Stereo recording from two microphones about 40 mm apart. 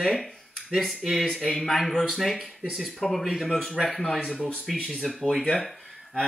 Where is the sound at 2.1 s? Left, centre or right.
Centre.